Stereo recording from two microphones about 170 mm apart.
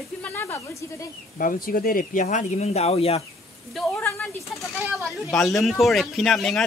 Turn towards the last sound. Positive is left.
turn(degrees=0)  # may be behind; listen again after turning